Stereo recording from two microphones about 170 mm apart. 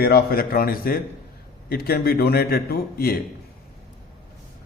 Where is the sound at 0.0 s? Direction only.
65° left (ahead or behind).